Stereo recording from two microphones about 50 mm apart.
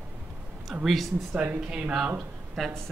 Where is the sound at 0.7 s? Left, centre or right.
Centre.